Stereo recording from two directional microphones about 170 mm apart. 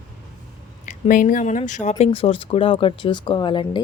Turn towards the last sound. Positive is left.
turn(degrees=30)  # may be behind; listen again after turning